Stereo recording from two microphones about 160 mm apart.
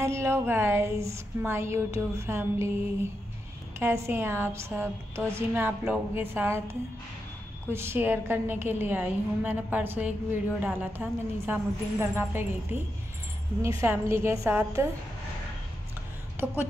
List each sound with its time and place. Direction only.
0.0 s a woman's voice: 15° right (ahead or behind)
3.8 s a woman's voice: 15° right (ahead or behind)
13.6 s a woman's voice: 15° right (ahead or behind)